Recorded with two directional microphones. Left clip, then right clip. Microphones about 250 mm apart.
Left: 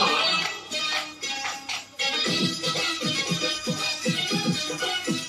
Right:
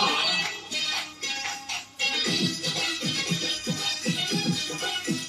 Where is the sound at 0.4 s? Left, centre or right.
Centre.